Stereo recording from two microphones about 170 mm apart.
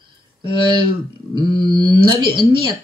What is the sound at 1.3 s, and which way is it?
Wail, 25° right (ahead or behind).